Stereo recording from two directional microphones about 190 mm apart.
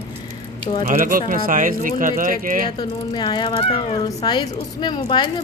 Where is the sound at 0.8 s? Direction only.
45° right (ahead or behind).